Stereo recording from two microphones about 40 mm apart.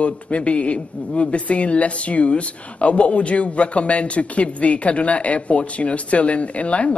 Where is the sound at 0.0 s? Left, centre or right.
Left.